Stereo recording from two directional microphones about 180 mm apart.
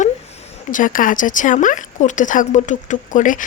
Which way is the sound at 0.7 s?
45° left (ahead or behind).